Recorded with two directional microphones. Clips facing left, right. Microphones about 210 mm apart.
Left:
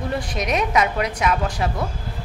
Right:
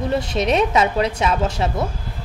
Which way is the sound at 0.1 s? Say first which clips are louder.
Right 5 dB; 25° right (ahead or behind).